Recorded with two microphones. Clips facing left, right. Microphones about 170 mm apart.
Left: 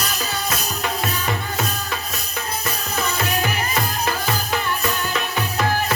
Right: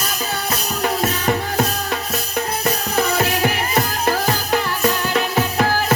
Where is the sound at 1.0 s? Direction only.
45° right (ahead or behind).